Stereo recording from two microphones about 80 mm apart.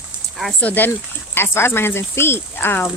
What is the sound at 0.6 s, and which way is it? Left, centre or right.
Speech, left.